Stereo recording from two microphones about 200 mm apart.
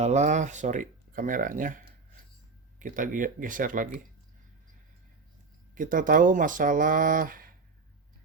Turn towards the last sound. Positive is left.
turn(degrees=-45)  # may be behind; listen again after turning